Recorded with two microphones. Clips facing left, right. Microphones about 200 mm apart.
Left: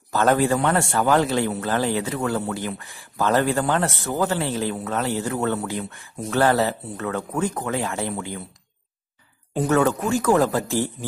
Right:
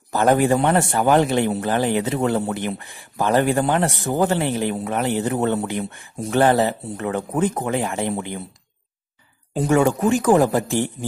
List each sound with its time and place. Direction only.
0.1 s speech: 15° right (ahead or behind)
9.5 s speech: 15° right (ahead or behind)